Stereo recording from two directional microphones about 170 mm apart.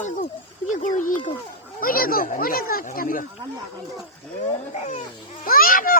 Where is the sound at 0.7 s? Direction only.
50° left (ahead or behind).